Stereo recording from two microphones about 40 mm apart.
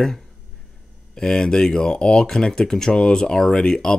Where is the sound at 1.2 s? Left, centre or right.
Centre.